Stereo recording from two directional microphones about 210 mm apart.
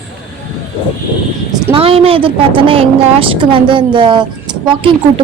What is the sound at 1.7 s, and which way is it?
A woman's voice, 25° right (ahead or behind).